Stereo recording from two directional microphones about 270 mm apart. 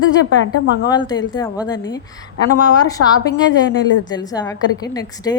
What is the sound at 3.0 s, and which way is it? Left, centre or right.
Speech, left.